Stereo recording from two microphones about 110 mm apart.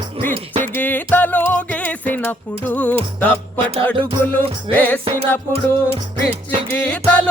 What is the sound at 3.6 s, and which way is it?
Music, 55° right (ahead or behind).